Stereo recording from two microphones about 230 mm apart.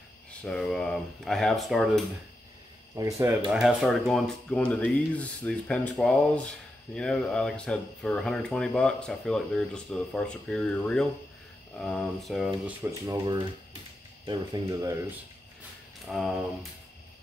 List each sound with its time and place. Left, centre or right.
0.4 s speech: centre
3.0 s speech: centre
3.5 s speech: centre
13.0 s speech: centre
16.1 s speech: centre